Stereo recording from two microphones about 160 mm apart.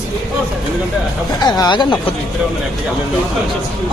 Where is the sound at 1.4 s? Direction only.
25° left (ahead or behind).